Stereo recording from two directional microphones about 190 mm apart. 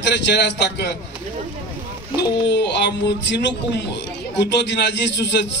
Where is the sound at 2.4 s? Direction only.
65° left (ahead or behind).